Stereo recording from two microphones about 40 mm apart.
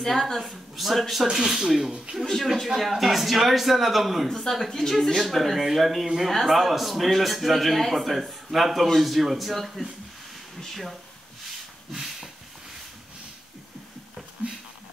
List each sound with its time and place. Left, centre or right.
0.0 s a woman's voice: centre
2.2 s a man's voice: centre
11.9 s a sound: centre